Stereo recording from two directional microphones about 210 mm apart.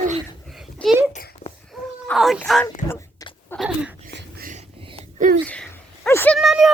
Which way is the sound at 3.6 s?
5° right (ahead or behind).